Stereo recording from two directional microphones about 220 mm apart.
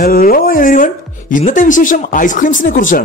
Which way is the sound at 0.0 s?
40° left (ahead or behind).